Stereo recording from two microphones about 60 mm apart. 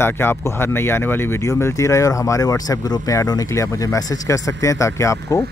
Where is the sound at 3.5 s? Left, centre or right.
Left.